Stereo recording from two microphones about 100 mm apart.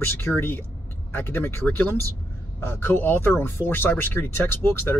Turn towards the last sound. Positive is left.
turn(degrees=20)  # may be behind; listen again after turning